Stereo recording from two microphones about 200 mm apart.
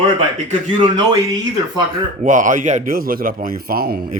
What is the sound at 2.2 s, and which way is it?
Speech, 40° right (ahead or behind).